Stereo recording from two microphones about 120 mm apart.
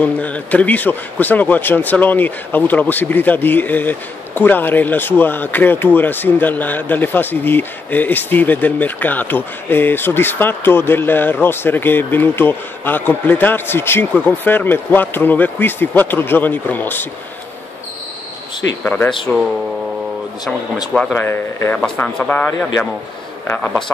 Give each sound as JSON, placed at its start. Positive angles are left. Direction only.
{"t": 0.0, "sound": "speech", "side_deg": 10}
{"t": 18.9, "sound": "speech", "side_deg": 10}
{"t": 20.9, "sound": "speech", "side_deg": 5}
{"t": 21.2, "sound": "speech", "side_deg": 20}